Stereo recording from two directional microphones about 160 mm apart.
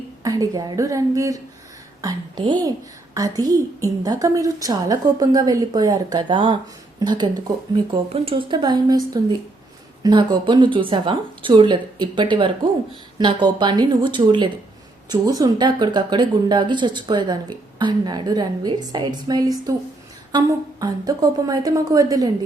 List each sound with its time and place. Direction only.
0.2 s a woman's voice: 20° right (ahead or behind)
8.1 s a woman's voice: 35° right (ahead or behind)